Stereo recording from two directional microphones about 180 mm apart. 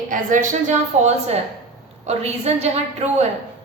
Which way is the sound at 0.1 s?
45° right (ahead or behind).